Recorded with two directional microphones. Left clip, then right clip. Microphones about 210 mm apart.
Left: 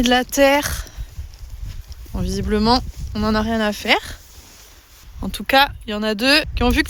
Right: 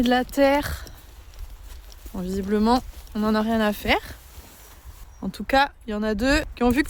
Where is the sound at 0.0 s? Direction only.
20° left (ahead or behind).